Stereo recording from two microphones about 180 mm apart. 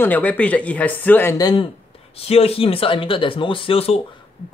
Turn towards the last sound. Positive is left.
turn(degrees=30)  # may be behind; listen again after turning